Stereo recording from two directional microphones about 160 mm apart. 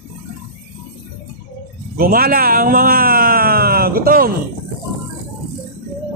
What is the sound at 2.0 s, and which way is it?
Speech, 65° right (ahead or behind).